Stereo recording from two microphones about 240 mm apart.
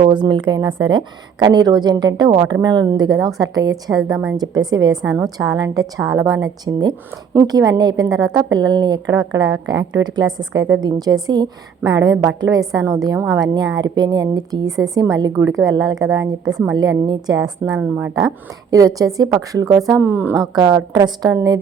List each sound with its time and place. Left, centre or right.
0.0 s a woman's voice: centre
4.1 s a woman's voice: centre
4.4 s a woman's voice: centre